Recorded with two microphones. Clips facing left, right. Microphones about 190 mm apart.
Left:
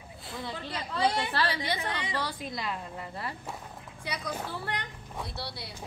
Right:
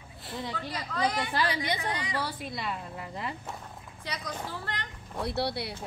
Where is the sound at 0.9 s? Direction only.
30° left (ahead or behind).